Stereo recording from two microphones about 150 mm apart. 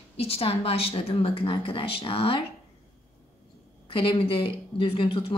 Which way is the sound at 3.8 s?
35° left (ahead or behind).